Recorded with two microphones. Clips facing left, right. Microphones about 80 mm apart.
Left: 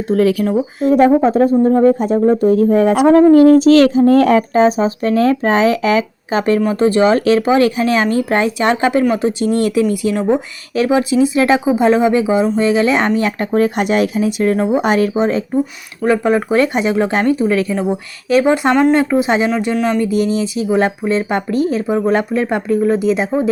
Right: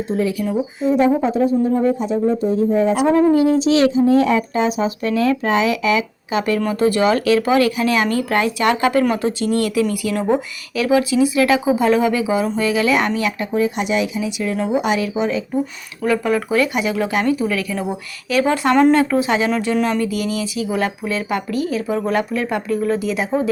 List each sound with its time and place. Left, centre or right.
0.1 s speech: left
13.4 s speech: left
16.0 s speech: left